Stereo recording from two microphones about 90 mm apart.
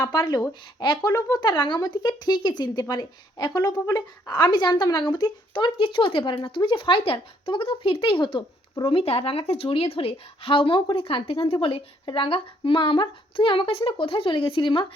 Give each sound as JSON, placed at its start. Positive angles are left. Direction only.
{"t": 0.0, "sound": "speech", "side_deg": 50}
{"t": 8.8, "sound": "speech", "side_deg": 85}
{"t": 10.9, "sound": "speech", "side_deg": 90}
{"t": 11.6, "sound": "speech", "side_deg": 75}